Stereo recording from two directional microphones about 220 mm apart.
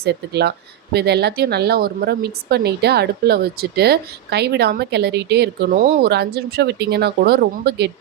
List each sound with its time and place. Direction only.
0.0 s speech: 50° right (ahead or behind)